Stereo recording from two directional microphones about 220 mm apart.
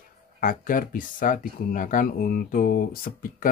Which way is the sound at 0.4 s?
40° left (ahead or behind).